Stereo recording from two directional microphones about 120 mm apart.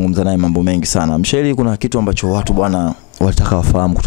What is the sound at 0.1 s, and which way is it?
Speech, 15° left (ahead or behind).